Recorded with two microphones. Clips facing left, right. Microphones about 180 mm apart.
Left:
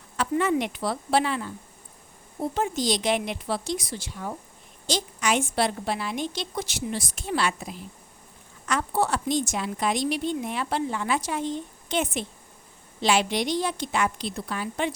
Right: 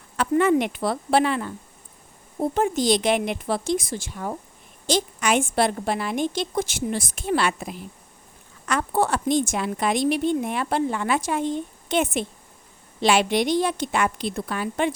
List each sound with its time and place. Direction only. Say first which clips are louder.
0.2 s a woman's voice: right 5 dB; 55° right (ahead or behind)